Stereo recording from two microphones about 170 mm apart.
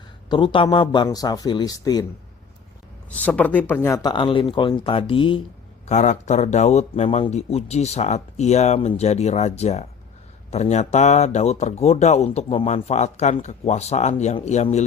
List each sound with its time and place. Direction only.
0.3 s speech: 30° left (ahead or behind)
3.2 s speech: 10° left (ahead or behind); by 5.4 s 30° left (ahead or behind)
5.9 s speech: 45° left (ahead or behind)